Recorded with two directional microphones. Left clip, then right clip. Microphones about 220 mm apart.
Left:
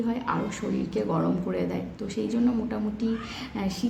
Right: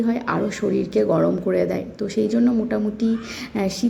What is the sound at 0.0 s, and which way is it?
Speech, 25° right (ahead or behind).